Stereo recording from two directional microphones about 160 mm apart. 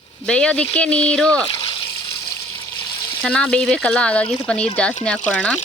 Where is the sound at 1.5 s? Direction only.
30° left (ahead or behind).